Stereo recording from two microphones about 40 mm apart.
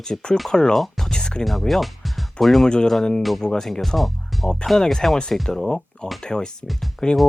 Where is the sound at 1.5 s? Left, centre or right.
Centre.